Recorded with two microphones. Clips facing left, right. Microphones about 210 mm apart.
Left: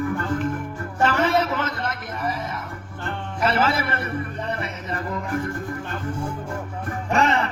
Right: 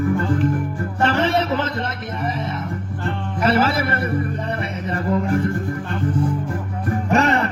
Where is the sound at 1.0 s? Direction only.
30° right (ahead or behind).